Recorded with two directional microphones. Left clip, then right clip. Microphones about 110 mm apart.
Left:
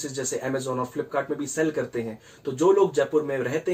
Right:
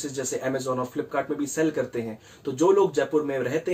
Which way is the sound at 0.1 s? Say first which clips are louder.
Even; 25° right (ahead or behind).